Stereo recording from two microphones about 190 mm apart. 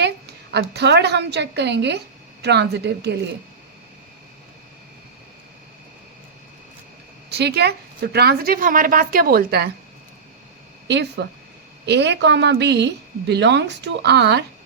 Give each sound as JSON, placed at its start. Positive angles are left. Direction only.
{"t": 0.0, "sound": "a woman's voice", "side_deg": -60}
{"t": 7.3, "sound": "a woman's voice", "side_deg": -60}
{"t": 10.8, "sound": "a woman's voice", "side_deg": -65}